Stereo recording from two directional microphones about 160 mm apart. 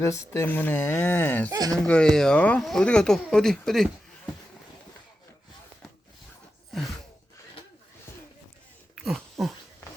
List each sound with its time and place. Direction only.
0.0 s speech: 20° left (ahead or behind)
1.5 s speech: 25° right (ahead or behind)
1.8 s speech: 5° left (ahead or behind)
9.0 s a sound: centre (ahead or behind)